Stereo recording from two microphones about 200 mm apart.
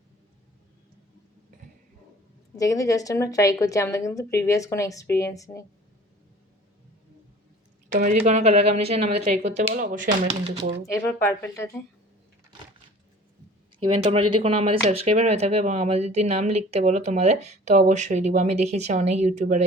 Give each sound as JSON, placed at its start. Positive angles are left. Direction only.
{"t": 2.6, "sound": "a woman's voice", "side_deg": 15}
{"t": 7.9, "sound": "speech", "side_deg": -40}
{"t": 10.8, "sound": "a woman's voice", "side_deg": 15}
{"t": 13.7, "sound": "speech", "side_deg": -30}